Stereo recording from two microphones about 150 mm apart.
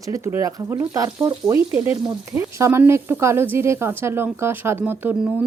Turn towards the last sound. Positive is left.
turn(degrees=-10)  # may be behind; listen again after turning